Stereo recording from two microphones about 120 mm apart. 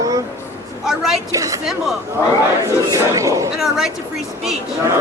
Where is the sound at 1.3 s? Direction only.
30° right (ahead or behind).